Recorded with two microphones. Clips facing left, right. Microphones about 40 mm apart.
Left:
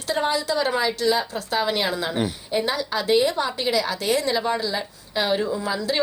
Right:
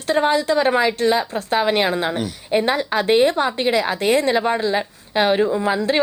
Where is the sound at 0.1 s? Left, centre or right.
Right.